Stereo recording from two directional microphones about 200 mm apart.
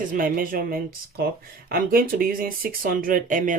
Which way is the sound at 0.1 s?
45° right (ahead or behind).